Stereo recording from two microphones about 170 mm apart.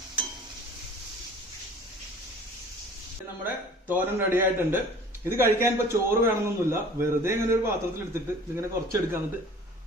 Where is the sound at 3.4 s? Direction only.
10° right (ahead or behind).